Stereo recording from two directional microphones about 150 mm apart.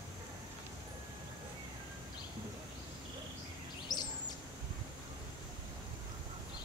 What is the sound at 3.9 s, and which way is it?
Bird, 25° left (ahead or behind).